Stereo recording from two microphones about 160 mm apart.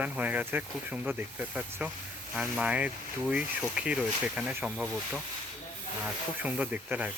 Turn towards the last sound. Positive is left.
turn(degrees=-10)  # may be behind; listen again after turning